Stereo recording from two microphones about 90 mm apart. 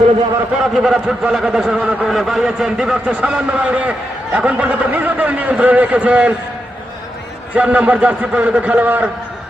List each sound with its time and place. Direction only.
0.6 s speech: 5° right (ahead or behind)
7.5 s speech: 15° right (ahead or behind)